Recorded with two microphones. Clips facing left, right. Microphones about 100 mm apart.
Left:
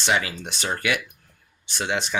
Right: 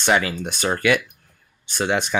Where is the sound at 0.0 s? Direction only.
50° right (ahead or behind).